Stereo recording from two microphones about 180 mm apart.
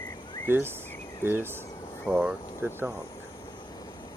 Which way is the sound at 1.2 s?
10° right (ahead or behind).